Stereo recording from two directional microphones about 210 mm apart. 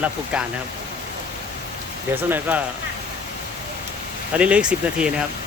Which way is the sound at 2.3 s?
10° right (ahead or behind).